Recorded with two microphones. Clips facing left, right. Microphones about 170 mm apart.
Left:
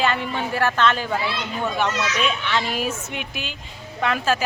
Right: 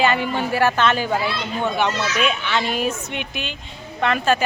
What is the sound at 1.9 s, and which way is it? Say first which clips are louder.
Speech: right 1 dB; 30° right (ahead or behind).